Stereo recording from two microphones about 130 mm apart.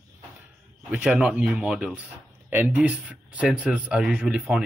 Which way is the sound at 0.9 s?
10° right (ahead or behind).